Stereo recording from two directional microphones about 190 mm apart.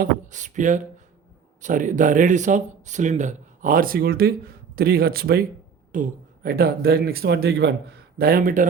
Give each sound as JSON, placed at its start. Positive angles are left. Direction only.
{"t": 0.0, "sound": "speech", "side_deg": -40}